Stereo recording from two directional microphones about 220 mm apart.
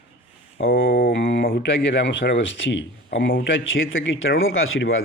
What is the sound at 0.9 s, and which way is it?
Speech, 40° left (ahead or behind).